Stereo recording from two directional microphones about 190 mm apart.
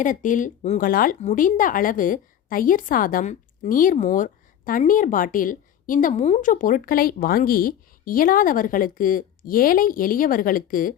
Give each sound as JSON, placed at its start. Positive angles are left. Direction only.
{"t": 0.0, "sound": "speech", "side_deg": 45}